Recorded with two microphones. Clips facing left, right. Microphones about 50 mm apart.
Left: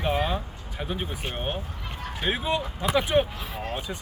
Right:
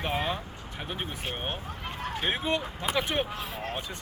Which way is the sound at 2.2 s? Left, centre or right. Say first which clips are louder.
Left 3 dB; centre.